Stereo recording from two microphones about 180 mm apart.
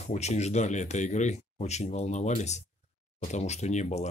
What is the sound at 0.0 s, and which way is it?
Speech, 40° left (ahead or behind).